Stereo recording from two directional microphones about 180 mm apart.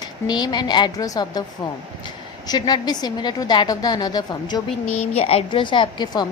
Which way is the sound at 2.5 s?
25° left (ahead or behind).